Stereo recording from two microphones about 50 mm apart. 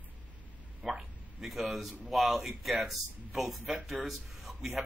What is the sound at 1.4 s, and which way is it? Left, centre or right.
A man's voice, centre.